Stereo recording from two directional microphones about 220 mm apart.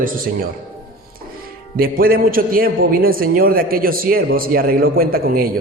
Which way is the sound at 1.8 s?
40° right (ahead or behind).